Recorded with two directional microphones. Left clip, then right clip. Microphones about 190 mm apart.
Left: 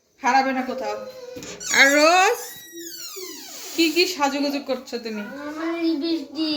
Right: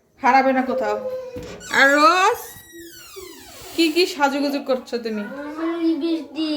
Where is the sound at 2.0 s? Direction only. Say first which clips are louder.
Right 1 dB; 10° right (ahead or behind).